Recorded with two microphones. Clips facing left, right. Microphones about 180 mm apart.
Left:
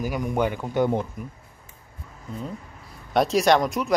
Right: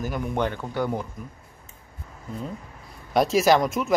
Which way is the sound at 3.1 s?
Centre (ahead or behind).